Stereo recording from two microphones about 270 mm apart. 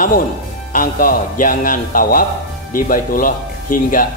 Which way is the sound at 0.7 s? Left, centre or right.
Left.